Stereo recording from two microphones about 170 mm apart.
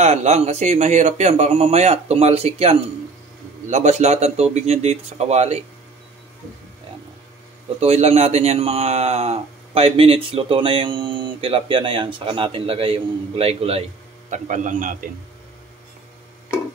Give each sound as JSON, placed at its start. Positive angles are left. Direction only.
{"t": 0.0, "sound": "a man's voice", "side_deg": -40}
{"t": 7.8, "sound": "a man's voice", "side_deg": -40}
{"t": 14.3, "sound": "a man's voice", "side_deg": -45}